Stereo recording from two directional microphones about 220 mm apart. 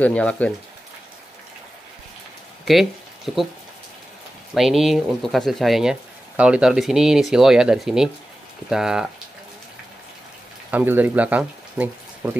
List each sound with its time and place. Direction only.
0.0 s speech: 5° left (ahead or behind)
2.6 s speech: centre (ahead or behind)
4.6 s speech: centre (ahead or behind)
10.7 s speech: 10° right (ahead or behind)